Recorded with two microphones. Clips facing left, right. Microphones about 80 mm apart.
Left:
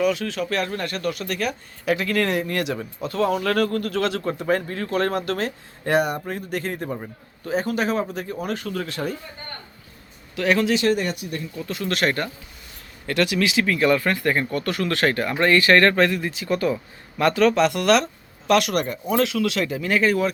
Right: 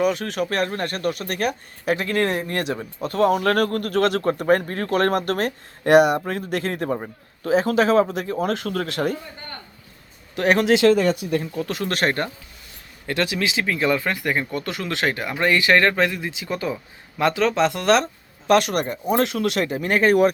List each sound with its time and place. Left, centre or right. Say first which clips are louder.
0.0 s speech: right 1 dB; right
3.0 s speech: right 4 dB; right
4.9 s speech: right 3 dB; right
7.4 s speech: right 5 dB; right
10.3 s speech: right 2 dB; right
10.6 s speech: right 7 dB; right
11.5 s speech: right 2 dB; right
13.1 s speech: left 2 dB; right